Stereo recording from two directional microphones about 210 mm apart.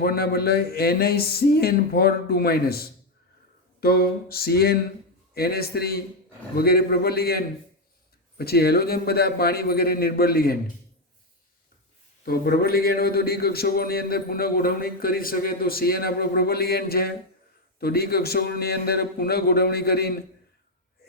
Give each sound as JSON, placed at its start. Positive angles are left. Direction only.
{"t": 0.0, "sound": "a man's voice", "side_deg": 45}
{"t": 12.2, "sound": "a man's voice", "side_deg": 45}